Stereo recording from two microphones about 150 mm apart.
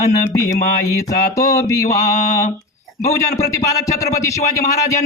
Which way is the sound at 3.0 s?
50° left (ahead or behind).